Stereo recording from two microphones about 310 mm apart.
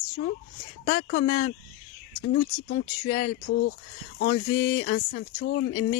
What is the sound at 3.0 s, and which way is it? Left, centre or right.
Speech, left.